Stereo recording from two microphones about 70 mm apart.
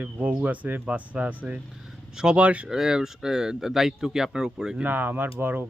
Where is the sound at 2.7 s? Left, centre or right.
Centre.